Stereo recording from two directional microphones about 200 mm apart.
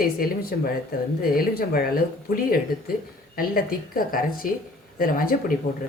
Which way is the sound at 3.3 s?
45° left (ahead or behind).